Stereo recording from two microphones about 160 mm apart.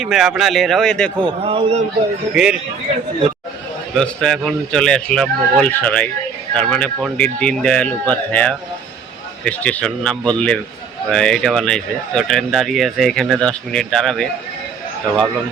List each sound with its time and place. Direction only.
0.0 s speech: centre (ahead or behind)
1.2 s a man's voice: 35° right (ahead or behind)
2.3 s speech: 5° right (ahead or behind)
3.9 s speech: 5° left (ahead or behind)